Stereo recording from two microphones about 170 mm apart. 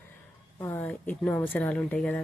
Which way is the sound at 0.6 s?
15° left (ahead or behind).